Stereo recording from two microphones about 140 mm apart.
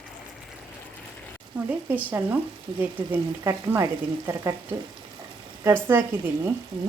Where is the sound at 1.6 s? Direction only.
10° right (ahead or behind).